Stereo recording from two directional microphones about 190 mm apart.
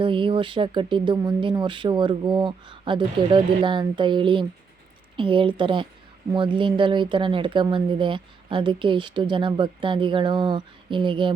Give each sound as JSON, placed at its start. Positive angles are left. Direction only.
{"t": 0.0, "sound": "speech", "side_deg": -25}